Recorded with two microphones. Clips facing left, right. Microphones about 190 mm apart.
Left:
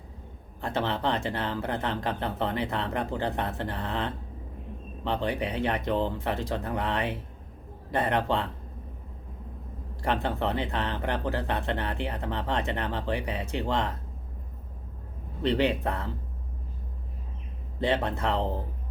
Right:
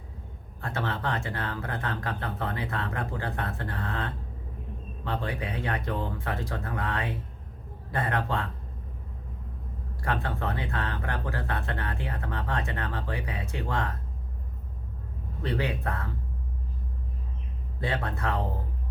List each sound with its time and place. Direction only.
0.6 s speech: 20° left (ahead or behind)
10.0 s speech: 20° left (ahead or behind)
15.4 s speech: 25° left (ahead or behind)
17.7 s speech: 20° left (ahead or behind)